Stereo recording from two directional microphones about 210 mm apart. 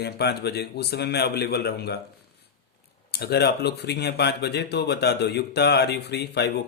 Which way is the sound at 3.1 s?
50° left (ahead or behind).